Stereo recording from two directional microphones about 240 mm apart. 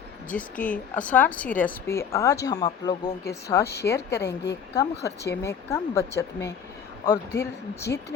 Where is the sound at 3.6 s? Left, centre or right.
Left.